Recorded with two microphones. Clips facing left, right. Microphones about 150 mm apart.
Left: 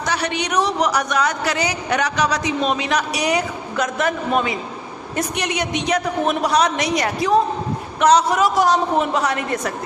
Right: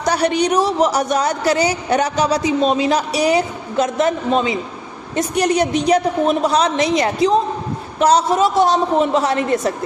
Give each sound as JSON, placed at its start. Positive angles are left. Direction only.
{"t": 0.0, "sound": "a woman's voice", "side_deg": -40}